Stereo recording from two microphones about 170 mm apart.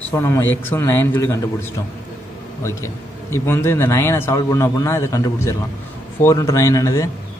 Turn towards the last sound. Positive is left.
turn(degrees=20)  # may be behind; listen again after turning